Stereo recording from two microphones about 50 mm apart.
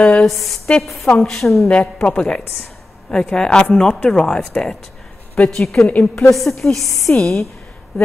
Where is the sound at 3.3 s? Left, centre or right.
Centre.